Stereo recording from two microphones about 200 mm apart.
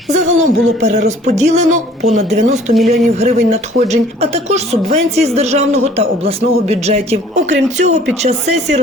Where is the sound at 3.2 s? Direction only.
30° right (ahead or behind).